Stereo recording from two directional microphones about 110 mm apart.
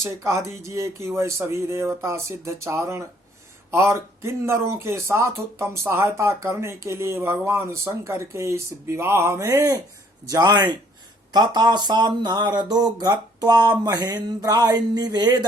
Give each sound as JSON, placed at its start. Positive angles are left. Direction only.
{"t": 0.0, "sound": "speech", "side_deg": -25}